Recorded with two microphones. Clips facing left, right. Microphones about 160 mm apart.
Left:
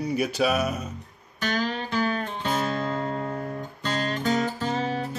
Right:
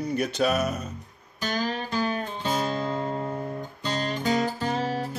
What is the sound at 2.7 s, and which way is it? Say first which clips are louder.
Music: even; 5° right (ahead or behind).